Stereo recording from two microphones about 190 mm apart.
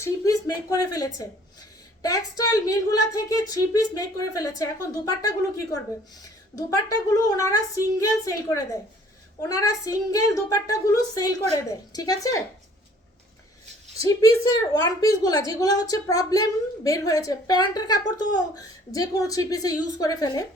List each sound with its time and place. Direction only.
0.0 s a woman's voice: 20° left (ahead or behind)
14.0 s a woman's voice: 15° left (ahead or behind)